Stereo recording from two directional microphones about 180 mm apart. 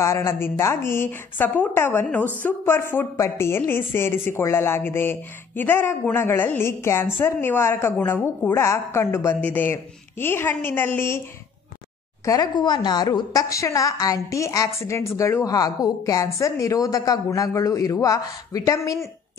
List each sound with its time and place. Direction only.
0.0 s a woman's voice: 15° left (ahead or behind)
12.3 s a woman's voice: 25° left (ahead or behind)